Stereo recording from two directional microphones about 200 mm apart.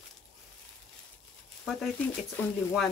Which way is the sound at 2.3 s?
Centre (ahead or behind).